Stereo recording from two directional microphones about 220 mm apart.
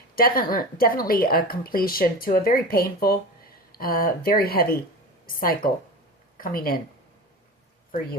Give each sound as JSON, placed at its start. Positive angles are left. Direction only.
{"t": 0.2, "sound": "speech", "side_deg": 40}